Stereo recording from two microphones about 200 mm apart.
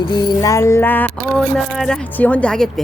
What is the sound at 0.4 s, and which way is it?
Speech, 15° left (ahead or behind).